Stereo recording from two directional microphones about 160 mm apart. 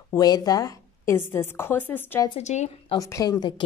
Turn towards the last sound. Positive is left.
turn(degrees=25)  # may be behind; listen again after turning